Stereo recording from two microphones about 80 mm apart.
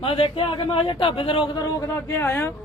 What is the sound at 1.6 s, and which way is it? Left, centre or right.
Speech, left.